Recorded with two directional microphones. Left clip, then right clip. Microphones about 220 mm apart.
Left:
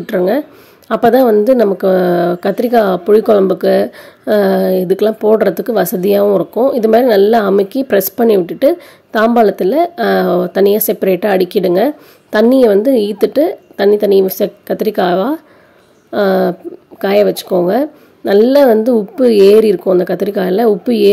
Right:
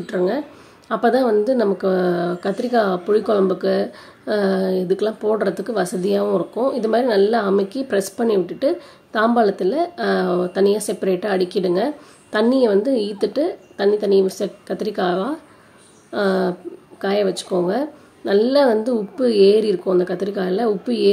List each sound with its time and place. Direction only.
0.0 s a woman's voice: 35° left (ahead or behind)